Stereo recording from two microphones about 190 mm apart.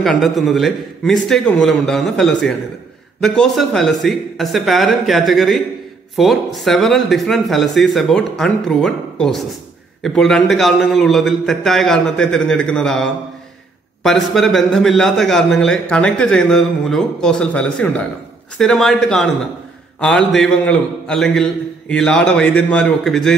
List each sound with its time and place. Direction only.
0.0 s a man's voice: centre (ahead or behind)